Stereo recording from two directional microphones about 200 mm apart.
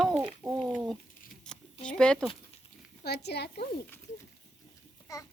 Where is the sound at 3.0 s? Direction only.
55° left (ahead or behind).